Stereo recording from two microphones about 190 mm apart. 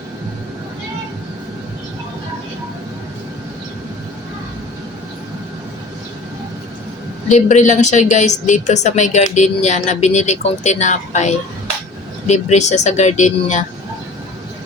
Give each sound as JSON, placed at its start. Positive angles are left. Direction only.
{"t": 7.3, "sound": "a woman's voice", "side_deg": 40}